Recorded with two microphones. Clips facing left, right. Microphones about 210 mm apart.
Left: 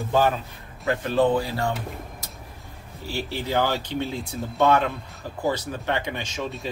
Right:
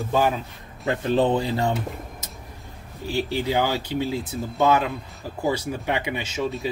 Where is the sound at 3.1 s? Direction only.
15° right (ahead or behind).